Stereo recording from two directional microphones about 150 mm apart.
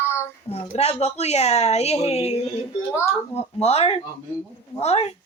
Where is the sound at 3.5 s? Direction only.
40° left (ahead or behind).